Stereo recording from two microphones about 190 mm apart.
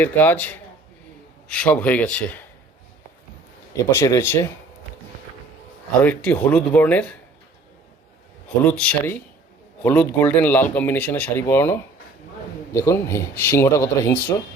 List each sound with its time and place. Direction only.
0.0 s speech: 10° left (ahead or behind)
3.8 s speech: 15° left (ahead or behind)
6.0 s speech: 10° left (ahead or behind)
8.6 s speech: 5° left (ahead or behind)